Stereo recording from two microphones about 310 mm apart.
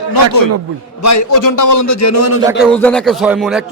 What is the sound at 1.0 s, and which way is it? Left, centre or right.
A man's voice, left.